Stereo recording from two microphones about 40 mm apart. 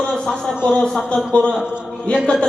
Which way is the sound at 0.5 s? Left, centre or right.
Right.